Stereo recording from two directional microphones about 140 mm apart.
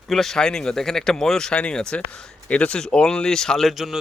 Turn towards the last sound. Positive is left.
turn(degrees=0)  # may be behind; listen again after turning